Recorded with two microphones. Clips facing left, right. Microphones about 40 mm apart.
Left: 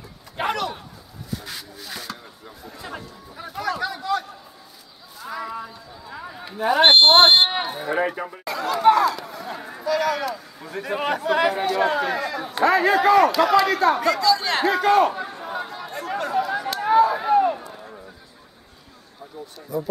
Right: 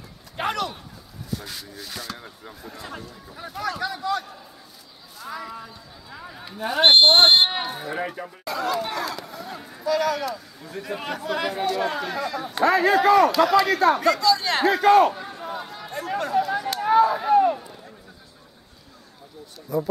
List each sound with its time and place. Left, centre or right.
0.4 s a sound: centre
1.3 s a man's voice: centre
8.0 s speech: centre
8.5 s chatter: centre
8.8 s a sound: centre
9.6 s a sound: centre
9.8 s a man's voice: centre
15.1 s chatter: centre
19.7 s a man's voice: centre